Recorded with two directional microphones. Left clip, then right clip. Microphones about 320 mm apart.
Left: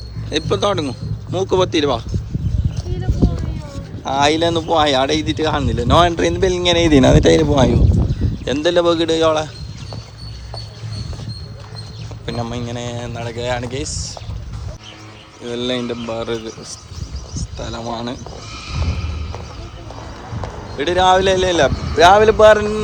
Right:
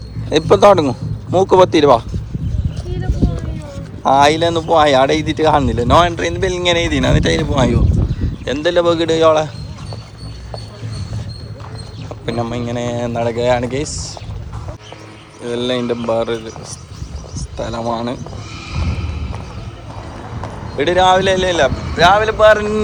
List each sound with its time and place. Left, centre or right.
0.3 s a man's voice: centre
4.0 s speech: centre
12.2 s speech: centre
15.4 s speech: centre
20.4 s speech: centre